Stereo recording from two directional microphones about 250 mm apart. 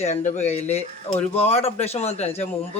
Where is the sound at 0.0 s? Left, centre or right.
Left.